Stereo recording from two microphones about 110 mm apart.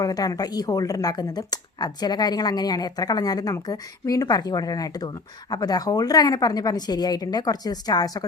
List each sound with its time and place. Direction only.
0.0 s speech: 35° left (ahead or behind)